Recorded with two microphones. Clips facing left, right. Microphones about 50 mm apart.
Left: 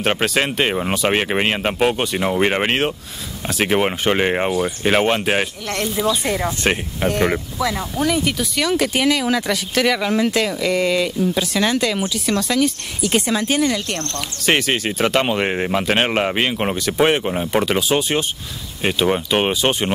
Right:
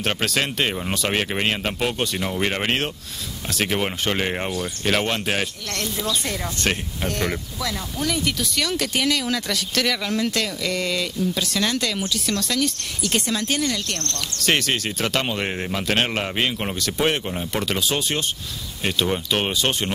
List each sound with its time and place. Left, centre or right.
0.0 s speech: centre